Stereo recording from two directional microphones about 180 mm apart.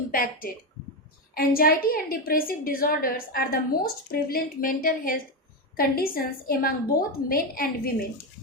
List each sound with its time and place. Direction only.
0.1 s a woman's voice: 55° left (ahead or behind)